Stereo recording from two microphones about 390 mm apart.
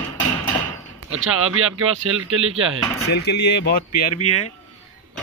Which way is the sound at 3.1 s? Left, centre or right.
Left.